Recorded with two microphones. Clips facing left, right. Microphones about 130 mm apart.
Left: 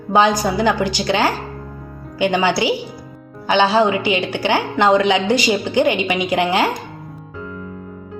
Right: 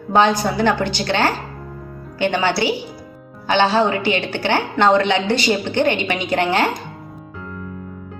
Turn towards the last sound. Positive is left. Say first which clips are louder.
# left 1 dB
turn(degrees=10)  # may be behind; listen again after turning